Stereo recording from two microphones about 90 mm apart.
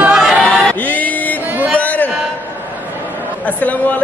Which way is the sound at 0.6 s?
15° left (ahead or behind).